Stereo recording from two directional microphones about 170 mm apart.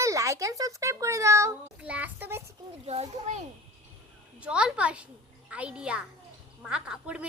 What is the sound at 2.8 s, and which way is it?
Speech, 40° right (ahead or behind).